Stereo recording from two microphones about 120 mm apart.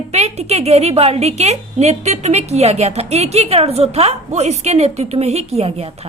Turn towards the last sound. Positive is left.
turn(degrees=-60)  # may be behind; listen again after turning